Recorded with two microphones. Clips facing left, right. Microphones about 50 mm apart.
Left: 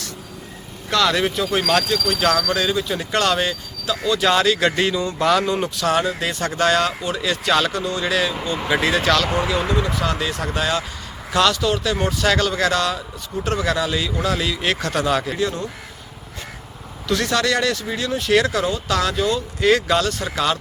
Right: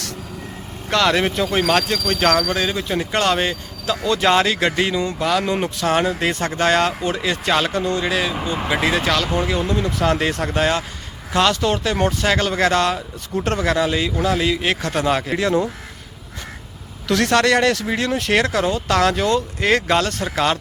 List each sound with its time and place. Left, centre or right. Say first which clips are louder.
0.9 s speech: right 1 dB; right
4.2 s speech: even; right
8.0 s speech: even; centre
9.6 s speech: even; left
10.0 s speech: right 4 dB; right
15.4 s speech: right 5 dB; right
17.1 s speech: right 4 dB; right
17.7 s speech: right 3 dB; right
18.3 s speech: even; right
19.5 s speech: left 4 dB; right